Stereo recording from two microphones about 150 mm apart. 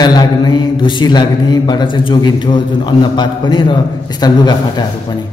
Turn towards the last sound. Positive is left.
turn(degrees=30)  # may be behind; listen again after turning